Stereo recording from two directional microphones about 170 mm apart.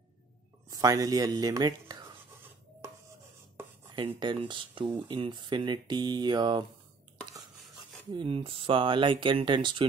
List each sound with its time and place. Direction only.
0.7 s speech: 20° right (ahead or behind)
4.2 s speech: 25° right (ahead or behind)
8.1 s speech: 30° right (ahead or behind)